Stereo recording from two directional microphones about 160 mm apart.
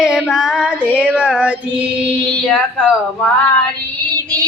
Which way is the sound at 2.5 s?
5° left (ahead or behind).